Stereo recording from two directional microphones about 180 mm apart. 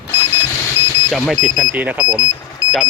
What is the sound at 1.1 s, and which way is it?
Speech, centre (ahead or behind).